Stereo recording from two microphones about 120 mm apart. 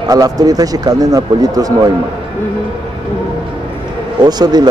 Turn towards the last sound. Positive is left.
turn(degrees=-35)  # may be behind; listen again after turning